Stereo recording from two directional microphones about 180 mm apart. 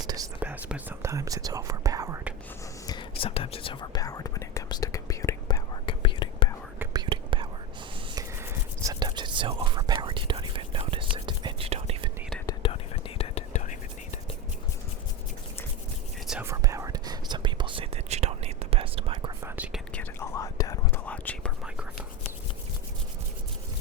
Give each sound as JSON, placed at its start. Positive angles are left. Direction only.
{"t": 0.0, "sound": "whispering", "side_deg": -20}
{"t": 0.3, "sound": "speech", "side_deg": -10}
{"t": 2.8, "sound": "whispering", "side_deg": 25}
{"t": 5.8, "sound": "whispering", "side_deg": 30}
{"t": 6.9, "sound": "whispering", "side_deg": -25}
{"t": 8.1, "sound": "whispering", "side_deg": -15}
{"t": 12.5, "sound": "whispering", "side_deg": 30}
{"t": 16.4, "sound": "whispering", "side_deg": -15}
{"t": 19.5, "sound": "whispering", "side_deg": -10}
{"t": 19.9, "sound": "whispering", "side_deg": 10}
{"t": 21.1, "sound": "whispering", "side_deg": 10}